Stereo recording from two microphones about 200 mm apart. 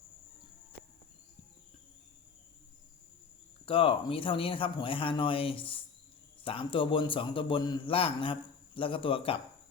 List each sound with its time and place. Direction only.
3.7 s a man's voice: 25° left (ahead or behind)